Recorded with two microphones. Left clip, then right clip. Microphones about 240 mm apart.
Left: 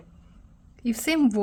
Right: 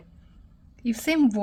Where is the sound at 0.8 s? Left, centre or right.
Centre.